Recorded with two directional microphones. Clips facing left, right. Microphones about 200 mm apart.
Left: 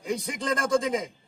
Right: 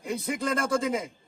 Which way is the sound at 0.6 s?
15° left (ahead or behind).